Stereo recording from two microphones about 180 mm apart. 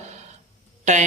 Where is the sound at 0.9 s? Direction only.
40° right (ahead or behind).